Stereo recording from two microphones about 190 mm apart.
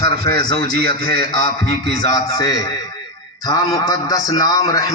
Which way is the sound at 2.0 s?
20° left (ahead or behind).